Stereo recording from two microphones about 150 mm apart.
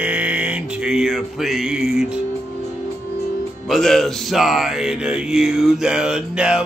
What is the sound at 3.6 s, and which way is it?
Music, centre (ahead or behind).